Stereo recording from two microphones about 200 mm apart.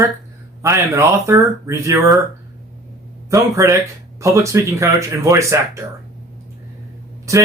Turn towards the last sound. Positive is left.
turn(degrees=-15)  # may be behind; listen again after turning